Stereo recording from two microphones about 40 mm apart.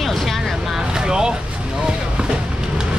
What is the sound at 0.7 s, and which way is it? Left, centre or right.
Vehicle, centre.